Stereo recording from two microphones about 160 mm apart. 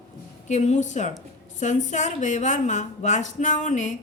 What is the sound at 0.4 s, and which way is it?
A woman's voice, 45° left (ahead or behind).